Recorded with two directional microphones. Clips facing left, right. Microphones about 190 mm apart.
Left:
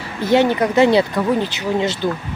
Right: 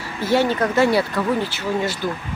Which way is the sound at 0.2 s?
20° left (ahead or behind).